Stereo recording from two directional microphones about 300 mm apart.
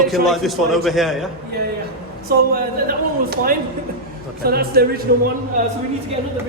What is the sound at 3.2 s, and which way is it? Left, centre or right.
A man's voice, right.